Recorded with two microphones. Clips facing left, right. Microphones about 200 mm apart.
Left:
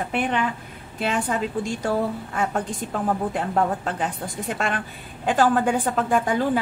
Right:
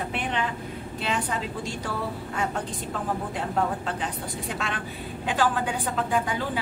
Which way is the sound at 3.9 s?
50° left (ahead or behind).